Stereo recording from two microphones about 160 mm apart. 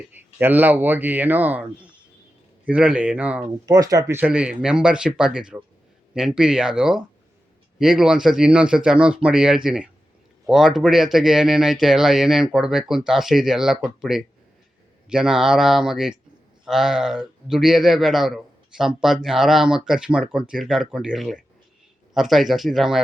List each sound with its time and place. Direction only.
0.1 s speech: 10° right (ahead or behind)
3.7 s speech: 20° right (ahead or behind)
4.2 s speech: 5° right (ahead or behind)